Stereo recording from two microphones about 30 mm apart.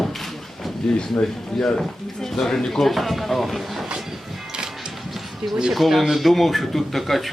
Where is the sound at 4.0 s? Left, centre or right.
Centre.